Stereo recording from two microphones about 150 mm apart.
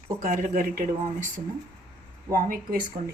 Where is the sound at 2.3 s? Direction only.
65° right (ahead or behind).